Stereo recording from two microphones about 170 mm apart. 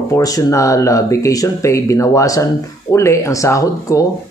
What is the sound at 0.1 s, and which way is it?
Speech, 20° left (ahead or behind).